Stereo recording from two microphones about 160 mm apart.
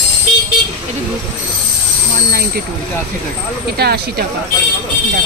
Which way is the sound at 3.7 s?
80° right.